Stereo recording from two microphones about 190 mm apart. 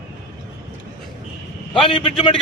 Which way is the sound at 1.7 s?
30° left (ahead or behind).